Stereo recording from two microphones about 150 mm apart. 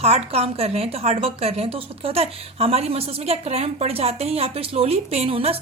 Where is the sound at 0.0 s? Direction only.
45° right (ahead or behind).